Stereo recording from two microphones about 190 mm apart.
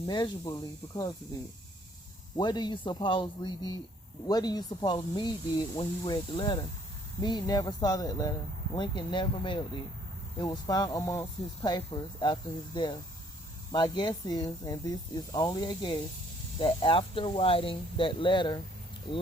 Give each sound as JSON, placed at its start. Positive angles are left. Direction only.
{"t": 0.0, "sound": "speech", "side_deg": 20}
{"t": 2.3, "sound": "speech", "side_deg": 20}